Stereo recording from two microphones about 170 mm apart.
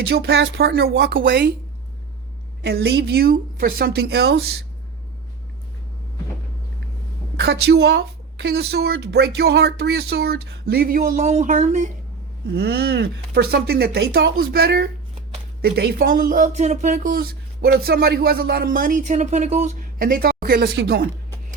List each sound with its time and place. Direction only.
0.1 s a woman's voice: 75° right (ahead or behind)
2.6 s a woman's voice: 70° right (ahead or behind)
7.3 s a woman's voice: 75° right (ahead or behind); by 11.9 s 45° right (ahead or behind)
12.5 s a woman's voice: 70° right (ahead or behind)